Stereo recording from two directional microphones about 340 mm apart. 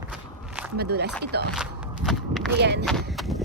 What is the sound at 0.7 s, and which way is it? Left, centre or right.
Speech, right.